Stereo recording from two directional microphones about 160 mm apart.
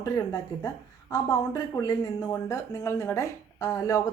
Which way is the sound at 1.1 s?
20° left (ahead or behind).